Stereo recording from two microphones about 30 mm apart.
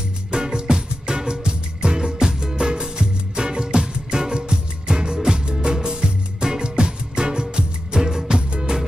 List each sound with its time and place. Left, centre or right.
0.3 s music: right